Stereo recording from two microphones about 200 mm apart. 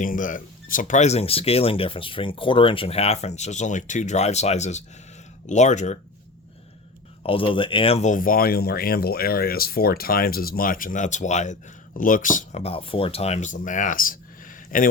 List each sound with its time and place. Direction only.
0.0 s speech: 40° left (ahead or behind)
7.2 s speech: 25° left (ahead or behind); by 14.8 s 40° left (ahead or behind)